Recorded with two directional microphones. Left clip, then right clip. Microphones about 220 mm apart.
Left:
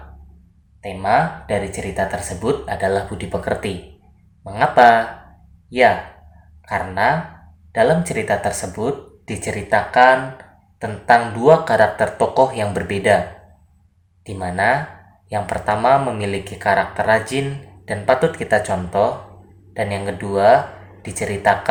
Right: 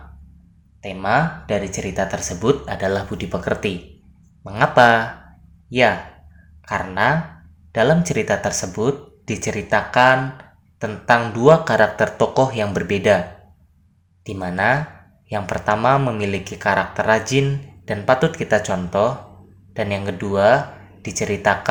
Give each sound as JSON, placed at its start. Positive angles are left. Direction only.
{"t": 0.8, "sound": "speech", "side_deg": -45}
{"t": 6.7, "sound": "speech", "side_deg": -45}
{"t": 14.3, "sound": "speech", "side_deg": -40}